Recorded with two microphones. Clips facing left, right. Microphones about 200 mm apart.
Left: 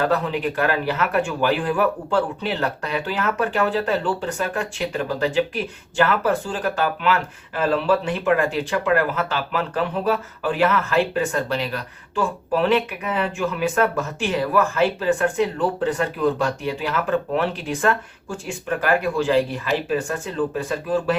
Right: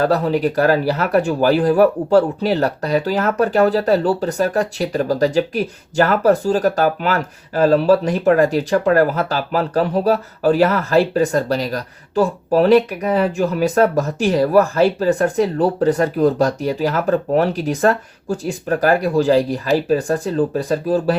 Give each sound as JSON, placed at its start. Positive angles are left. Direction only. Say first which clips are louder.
{"t": 0.0, "sound": "speech", "louder": "right 5 dB", "side_deg": -35}